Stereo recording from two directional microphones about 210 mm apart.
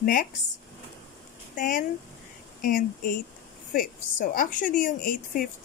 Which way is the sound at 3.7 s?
40° left (ahead or behind).